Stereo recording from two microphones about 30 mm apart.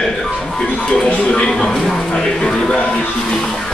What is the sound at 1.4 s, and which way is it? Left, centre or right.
Speech, left.